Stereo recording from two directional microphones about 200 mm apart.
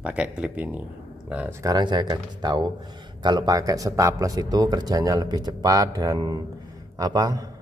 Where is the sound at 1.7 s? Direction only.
20° right (ahead or behind).